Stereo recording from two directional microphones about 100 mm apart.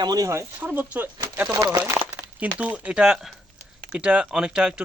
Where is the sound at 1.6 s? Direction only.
45° right (ahead or behind).